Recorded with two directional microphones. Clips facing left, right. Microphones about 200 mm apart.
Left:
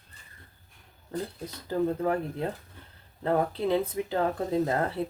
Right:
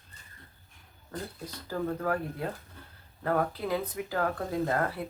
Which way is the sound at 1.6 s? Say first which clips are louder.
Left 4 dB; 20° left (ahead or behind).